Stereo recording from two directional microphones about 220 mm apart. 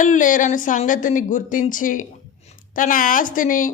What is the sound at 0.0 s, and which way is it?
Speech, 35° left (ahead or behind).